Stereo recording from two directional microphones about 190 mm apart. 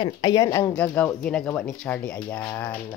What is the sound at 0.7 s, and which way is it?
Speech, 5° left (ahead or behind).